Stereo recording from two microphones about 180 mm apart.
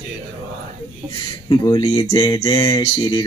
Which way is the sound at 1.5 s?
20° left (ahead or behind).